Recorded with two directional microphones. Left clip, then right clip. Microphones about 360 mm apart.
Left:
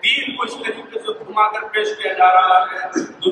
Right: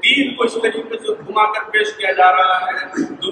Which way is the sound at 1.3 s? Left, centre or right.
Centre.